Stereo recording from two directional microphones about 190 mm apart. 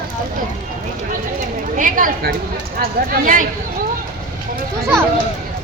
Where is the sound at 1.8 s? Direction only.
45° right (ahead or behind).